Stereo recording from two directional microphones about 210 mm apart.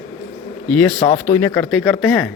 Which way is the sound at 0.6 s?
5° left (ahead or behind).